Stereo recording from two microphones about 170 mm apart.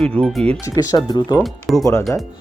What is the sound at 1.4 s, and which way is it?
Speech, centre (ahead or behind).